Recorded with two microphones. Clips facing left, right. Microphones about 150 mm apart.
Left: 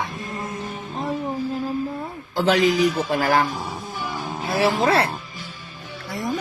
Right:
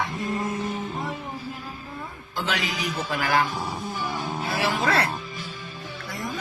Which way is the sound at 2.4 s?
40° left (ahead or behind).